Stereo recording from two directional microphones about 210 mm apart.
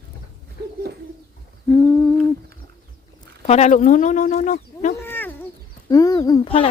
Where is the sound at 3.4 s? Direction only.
30° left (ahead or behind).